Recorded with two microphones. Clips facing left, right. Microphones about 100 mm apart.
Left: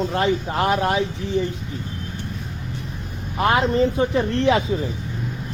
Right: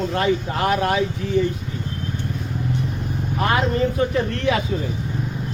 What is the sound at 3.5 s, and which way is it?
Speech, 25° left (ahead or behind).